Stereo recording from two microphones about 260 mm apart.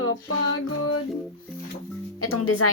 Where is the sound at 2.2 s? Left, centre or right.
Left.